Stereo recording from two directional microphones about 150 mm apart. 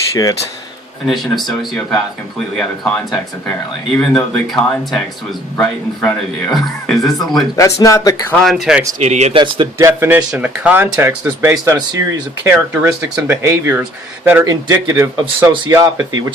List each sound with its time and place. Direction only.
0.1 s speech: 20° left (ahead or behind)
1.0 s a man's voice: centre (ahead or behind)
7.5 s speech: 20° left (ahead or behind)
8.4 s speech: 5° right (ahead or behind)
9.0 s speech: 50° right (ahead or behind)
9.3 s speech: 30° right (ahead or behind)
9.7 s speech: 15° right (ahead or behind)